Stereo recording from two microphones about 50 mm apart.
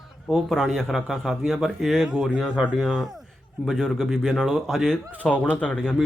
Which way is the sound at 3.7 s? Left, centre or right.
Centre.